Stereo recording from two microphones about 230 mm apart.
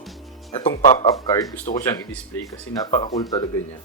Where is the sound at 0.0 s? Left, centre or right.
Centre.